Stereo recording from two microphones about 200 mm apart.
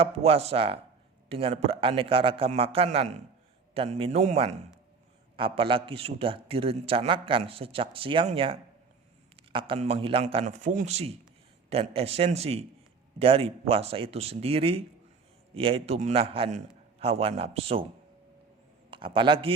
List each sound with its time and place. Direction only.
0.0 s a man's voice: 30° right (ahead or behind)
18.9 s speech: 25° right (ahead or behind)